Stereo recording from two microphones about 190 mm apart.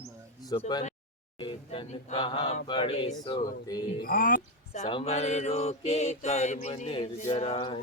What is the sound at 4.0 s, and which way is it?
Speech, 50° left (ahead or behind).